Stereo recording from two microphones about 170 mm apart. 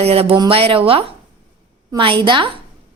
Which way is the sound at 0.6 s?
35° right (ahead or behind).